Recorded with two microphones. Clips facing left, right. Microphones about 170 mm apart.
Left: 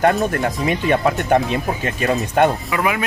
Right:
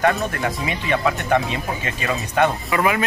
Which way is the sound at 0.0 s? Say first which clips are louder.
Left 3 dB; 40° left (ahead or behind).